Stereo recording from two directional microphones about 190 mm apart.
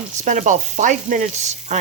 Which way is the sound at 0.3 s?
40° right (ahead or behind).